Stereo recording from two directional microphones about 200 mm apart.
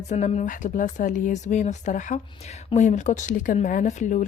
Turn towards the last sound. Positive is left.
turn(degrees=35)  # may be behind; listen again after turning